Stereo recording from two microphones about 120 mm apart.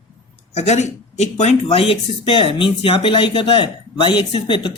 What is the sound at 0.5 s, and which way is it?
Speech, 70° left (ahead or behind).